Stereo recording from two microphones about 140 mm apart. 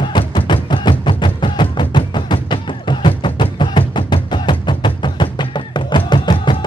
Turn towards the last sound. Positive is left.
turn(degrees=35)  # may be behind; listen again after turning